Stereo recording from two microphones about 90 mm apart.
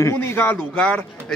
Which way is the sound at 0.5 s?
10° left (ahead or behind).